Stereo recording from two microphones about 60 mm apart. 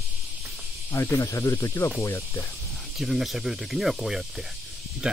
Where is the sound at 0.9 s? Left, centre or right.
Left.